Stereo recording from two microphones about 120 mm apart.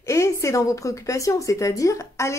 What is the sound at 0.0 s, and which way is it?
A woman's voice, 25° left (ahead or behind).